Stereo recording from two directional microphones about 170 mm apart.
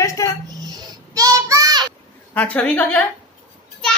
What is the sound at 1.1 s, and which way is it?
Child singing, 20° right (ahead or behind).